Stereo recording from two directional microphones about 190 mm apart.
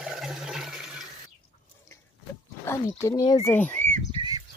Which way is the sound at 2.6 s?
15° left (ahead or behind).